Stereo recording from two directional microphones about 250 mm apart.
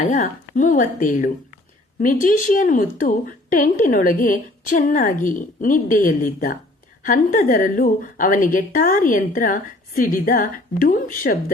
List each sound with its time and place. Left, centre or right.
0.1 s a woman's voice: left